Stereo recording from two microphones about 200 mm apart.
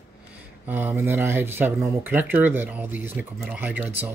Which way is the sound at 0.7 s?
10° right (ahead or behind).